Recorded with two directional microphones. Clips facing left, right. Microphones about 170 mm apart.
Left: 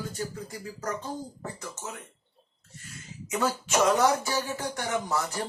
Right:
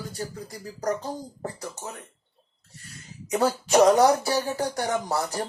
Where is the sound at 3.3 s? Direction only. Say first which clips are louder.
Right 5 dB; 35° right (ahead or behind).